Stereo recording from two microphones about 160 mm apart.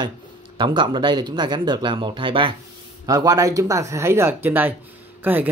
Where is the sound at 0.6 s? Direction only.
30° right (ahead or behind).